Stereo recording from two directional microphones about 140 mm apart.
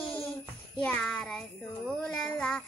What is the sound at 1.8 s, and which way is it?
Music, 5° left (ahead or behind).